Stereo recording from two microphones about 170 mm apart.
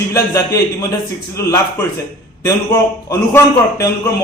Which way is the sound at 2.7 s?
15° left (ahead or behind).